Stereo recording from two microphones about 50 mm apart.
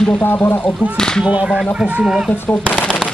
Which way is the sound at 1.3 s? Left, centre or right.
Right.